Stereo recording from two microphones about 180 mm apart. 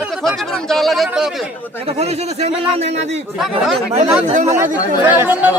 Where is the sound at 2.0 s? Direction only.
35° right (ahead or behind).